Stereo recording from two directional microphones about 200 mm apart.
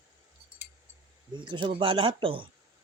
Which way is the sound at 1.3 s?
25° right (ahead or behind).